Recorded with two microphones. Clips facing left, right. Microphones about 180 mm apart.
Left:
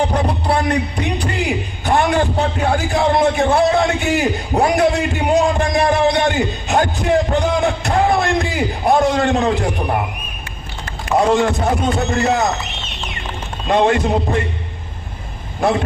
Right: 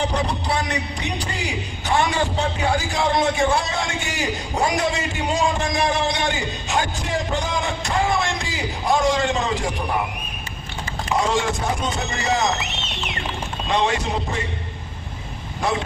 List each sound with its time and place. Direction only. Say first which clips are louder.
0.1 s a sound: left 5 dB; 55° left (ahead or behind)
10.8 s a man's voice: left 7 dB; 60° left (ahead or behind)
13.7 s speech: left 7 dB; 55° left (ahead or behind)